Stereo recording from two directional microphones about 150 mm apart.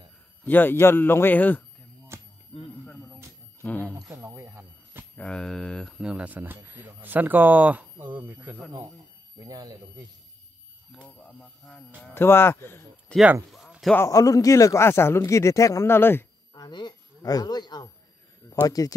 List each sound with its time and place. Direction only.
0.5 s speech: 15° left (ahead or behind)
2.1 s a sound: 20° right (ahead or behind)
3.6 s speech: 10° left (ahead or behind)
3.9 s speech: 15° right (ahead or behind)
5.1 s speech: 5° left (ahead or behind)
5.9 s speech: 5° right (ahead or behind)
9.4 s speech: 25° right (ahead or behind)
10.9 s speech: 10° left (ahead or behind)
13.1 s speech: 5° right (ahead or behind)
13.9 s speech: 20° left (ahead or behind)
16.5 s speech: 30° left (ahead or behind)